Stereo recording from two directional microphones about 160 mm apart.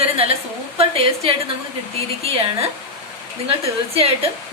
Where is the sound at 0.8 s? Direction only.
35° right (ahead or behind).